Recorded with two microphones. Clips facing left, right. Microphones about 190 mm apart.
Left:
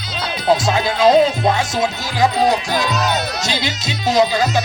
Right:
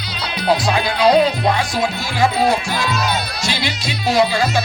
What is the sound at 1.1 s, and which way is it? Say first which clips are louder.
Speech: left 1 dB; 25° left (ahead or behind).